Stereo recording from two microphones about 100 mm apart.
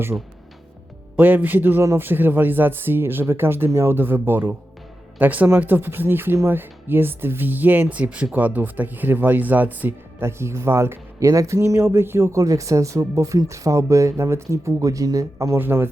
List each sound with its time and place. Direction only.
0.1 s speech: 15° right (ahead or behind)